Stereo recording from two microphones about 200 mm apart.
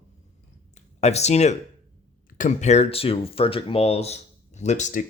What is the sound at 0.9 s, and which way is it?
Speech, 35° left (ahead or behind).